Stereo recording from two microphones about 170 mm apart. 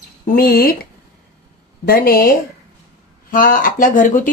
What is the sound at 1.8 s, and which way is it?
A woman's voice, 60° left (ahead or behind).